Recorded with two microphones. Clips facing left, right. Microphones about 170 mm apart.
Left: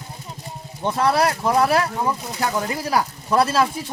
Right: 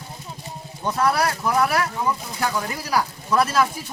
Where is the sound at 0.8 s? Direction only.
25° left (ahead or behind).